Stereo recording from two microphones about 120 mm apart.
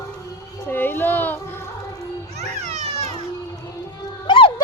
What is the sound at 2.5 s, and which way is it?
Children playing, 70° right (ahead or behind).